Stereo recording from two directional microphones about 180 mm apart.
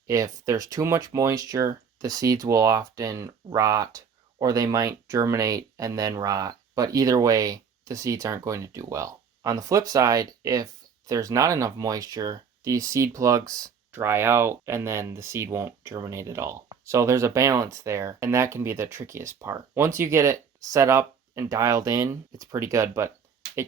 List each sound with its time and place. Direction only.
0.1 s speech: 20° right (ahead or behind)